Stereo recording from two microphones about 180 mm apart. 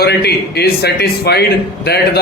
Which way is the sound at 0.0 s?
65° left (ahead or behind).